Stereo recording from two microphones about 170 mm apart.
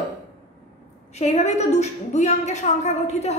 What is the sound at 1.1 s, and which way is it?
A woman's voice, 40° left (ahead or behind).